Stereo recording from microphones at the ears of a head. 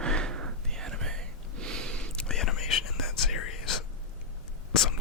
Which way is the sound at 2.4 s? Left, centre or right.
Left.